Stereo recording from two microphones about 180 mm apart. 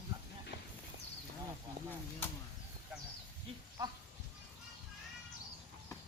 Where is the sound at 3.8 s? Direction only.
20° right (ahead or behind).